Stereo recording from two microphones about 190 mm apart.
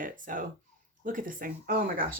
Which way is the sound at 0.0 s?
45° right (ahead or behind).